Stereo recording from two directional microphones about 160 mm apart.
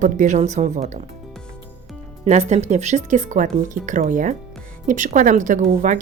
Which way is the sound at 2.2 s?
45° right (ahead or behind).